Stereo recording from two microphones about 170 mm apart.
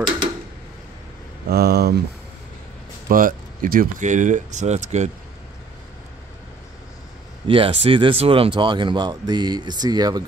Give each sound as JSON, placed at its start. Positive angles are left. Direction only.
{"t": 1.5, "sound": "speech", "side_deg": -70}
{"t": 3.1, "sound": "speech", "side_deg": -55}
{"t": 7.4, "sound": "speech", "side_deg": -30}